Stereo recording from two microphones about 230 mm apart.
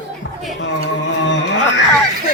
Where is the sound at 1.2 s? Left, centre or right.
Left.